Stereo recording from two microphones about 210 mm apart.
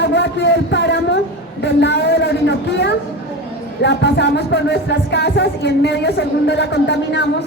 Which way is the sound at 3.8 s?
55° left (ahead or behind).